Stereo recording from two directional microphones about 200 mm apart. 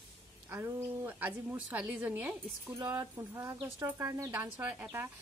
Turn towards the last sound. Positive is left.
turn(degrees=-10)  # may be behind; listen again after turning